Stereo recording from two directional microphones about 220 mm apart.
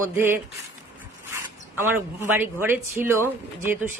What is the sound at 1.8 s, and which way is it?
Speech, 10° right (ahead or behind).